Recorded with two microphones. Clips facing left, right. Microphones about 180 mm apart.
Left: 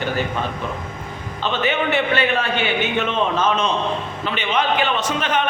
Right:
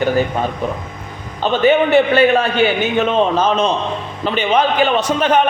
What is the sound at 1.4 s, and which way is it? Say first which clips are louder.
A man's voice: right 8 dB; 45° right (ahead or behind).